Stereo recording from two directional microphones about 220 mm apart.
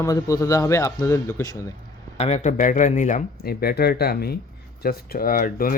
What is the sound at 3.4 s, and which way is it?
Speech, 45° left (ahead or behind).